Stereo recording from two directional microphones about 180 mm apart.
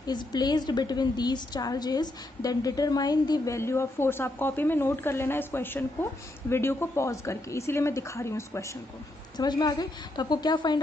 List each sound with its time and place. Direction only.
0.0 s a woman's voice: 25° left (ahead or behind)